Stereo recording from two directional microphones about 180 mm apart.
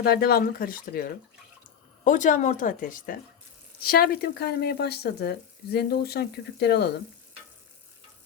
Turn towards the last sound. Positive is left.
turn(degrees=65)  # may be behind; listen again after turning